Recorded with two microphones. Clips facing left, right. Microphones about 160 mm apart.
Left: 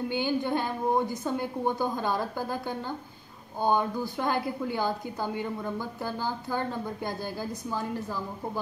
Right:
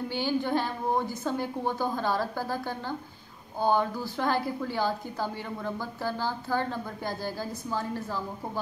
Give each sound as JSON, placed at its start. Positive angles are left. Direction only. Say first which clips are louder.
{"t": 0.1, "sound": "a woman's voice", "louder": "right 1 dB", "side_deg": 15}
{"t": 3.6, "sound": "a woman's voice", "louder": "even", "side_deg": 15}